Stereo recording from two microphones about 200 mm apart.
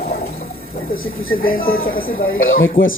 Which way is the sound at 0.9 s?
90° left.